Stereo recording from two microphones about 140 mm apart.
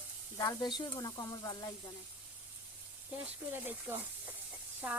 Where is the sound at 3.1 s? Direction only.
15° right (ahead or behind).